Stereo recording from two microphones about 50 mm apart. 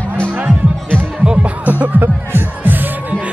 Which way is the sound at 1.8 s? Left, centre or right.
Right.